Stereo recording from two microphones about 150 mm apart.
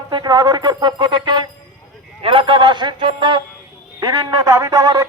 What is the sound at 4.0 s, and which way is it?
Speech, 20° right (ahead or behind).